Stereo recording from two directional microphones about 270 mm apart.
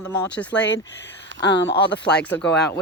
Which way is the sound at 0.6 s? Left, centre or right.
Left.